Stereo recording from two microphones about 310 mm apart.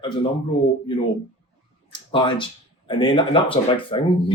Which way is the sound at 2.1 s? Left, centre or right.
Centre.